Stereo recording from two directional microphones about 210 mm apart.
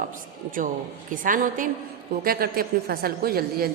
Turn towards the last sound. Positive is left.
turn(degrees=-45)  # may be behind; listen again after turning